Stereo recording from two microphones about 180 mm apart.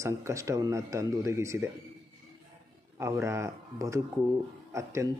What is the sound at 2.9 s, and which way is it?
Speech, 15° right (ahead or behind).